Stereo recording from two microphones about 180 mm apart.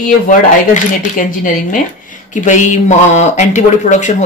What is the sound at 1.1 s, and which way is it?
A woman's voice, 45° left (ahead or behind).